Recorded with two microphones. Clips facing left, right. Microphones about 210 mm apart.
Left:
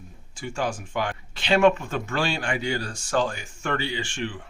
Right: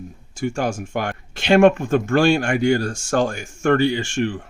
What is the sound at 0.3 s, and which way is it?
Speech, 45° right (ahead or behind).